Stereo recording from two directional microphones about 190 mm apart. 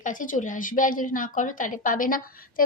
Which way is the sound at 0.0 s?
45° left (ahead or behind).